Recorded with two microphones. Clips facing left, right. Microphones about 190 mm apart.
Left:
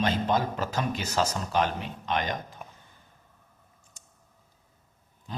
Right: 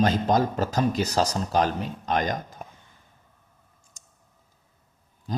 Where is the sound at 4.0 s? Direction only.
40° right (ahead or behind).